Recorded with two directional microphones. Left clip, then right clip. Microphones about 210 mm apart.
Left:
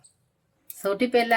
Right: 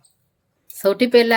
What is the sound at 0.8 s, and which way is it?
Speech, 45° right (ahead or behind).